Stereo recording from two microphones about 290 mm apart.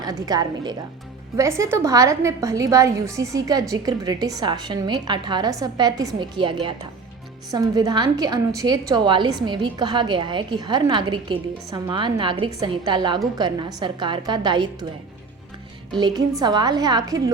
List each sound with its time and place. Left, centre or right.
0.0 s a woman's voice: centre
15.9 s a woman's voice: centre